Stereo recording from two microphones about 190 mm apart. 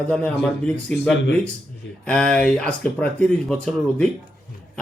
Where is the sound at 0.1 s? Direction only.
5° left (ahead or behind).